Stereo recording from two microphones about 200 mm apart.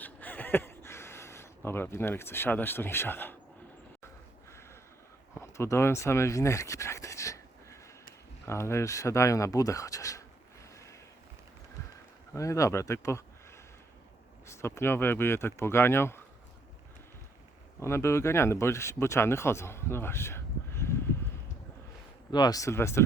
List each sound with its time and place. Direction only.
0.0 s a sound: 10° left (ahead or behind)
5.4 s a sound: 15° left (ahead or behind)
8.4 s speech: 15° left (ahead or behind)
12.3 s speech: 15° left (ahead or behind)
14.4 s speech: 15° left (ahead or behind)
17.7 s speech: 15° left (ahead or behind)
22.3 s speech: 20° left (ahead or behind)